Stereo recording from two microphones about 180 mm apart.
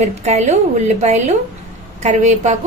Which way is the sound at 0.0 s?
40° right (ahead or behind).